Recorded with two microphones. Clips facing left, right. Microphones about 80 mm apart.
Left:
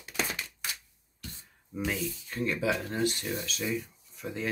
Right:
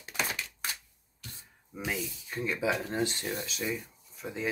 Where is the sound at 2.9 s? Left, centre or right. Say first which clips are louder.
Left 1 dB; right.